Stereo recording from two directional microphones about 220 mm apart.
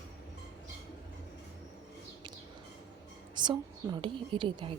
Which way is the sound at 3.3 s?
20° right (ahead or behind).